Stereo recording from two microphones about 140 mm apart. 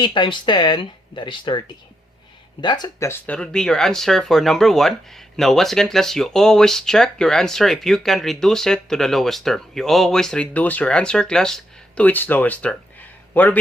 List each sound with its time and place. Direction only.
0.0 s speech: 35° left (ahead or behind)
3.1 s a man's voice: 10° left (ahead or behind)